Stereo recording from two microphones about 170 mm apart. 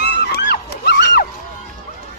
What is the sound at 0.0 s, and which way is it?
Music, 75° left (ahead or behind).